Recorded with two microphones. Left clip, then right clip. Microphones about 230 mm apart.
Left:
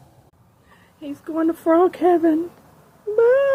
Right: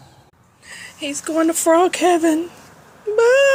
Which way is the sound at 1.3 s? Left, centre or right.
Centre.